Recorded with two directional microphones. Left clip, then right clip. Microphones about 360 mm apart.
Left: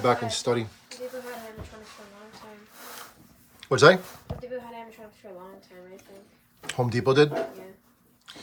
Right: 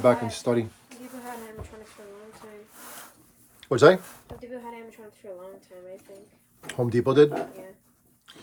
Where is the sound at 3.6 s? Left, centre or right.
Centre.